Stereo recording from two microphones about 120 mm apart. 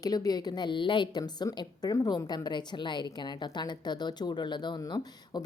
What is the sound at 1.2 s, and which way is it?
A woman's voice, 30° left (ahead or behind).